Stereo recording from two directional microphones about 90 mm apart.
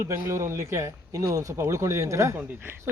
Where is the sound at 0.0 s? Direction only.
30° right (ahead or behind).